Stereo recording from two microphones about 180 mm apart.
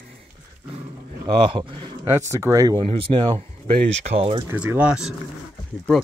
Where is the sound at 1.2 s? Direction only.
25° right (ahead or behind).